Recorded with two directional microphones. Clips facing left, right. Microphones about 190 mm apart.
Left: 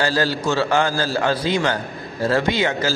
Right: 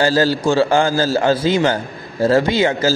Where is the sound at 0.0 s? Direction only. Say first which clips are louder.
Right 5 dB; 30° right (ahead or behind).